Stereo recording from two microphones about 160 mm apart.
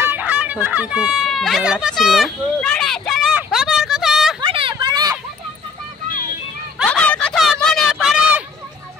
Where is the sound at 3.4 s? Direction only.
5° right (ahead or behind).